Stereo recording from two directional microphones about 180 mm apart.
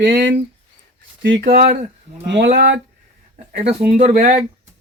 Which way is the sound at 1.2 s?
50° right (ahead or behind).